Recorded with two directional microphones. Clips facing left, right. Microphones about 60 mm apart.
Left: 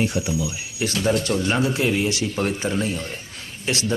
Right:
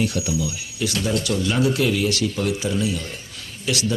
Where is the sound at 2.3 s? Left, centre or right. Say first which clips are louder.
Even; left.